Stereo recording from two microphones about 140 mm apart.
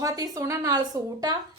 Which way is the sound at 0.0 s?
25° right (ahead or behind).